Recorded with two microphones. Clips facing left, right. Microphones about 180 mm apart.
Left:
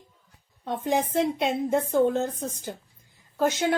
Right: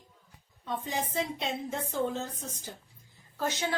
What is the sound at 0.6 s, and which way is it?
A woman's voice, 60° left (ahead or behind).